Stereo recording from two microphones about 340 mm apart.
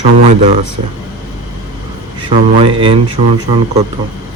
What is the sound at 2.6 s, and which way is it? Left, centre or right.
Speech, centre.